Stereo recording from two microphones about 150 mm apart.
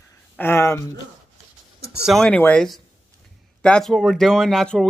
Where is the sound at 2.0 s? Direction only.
5° left (ahead or behind).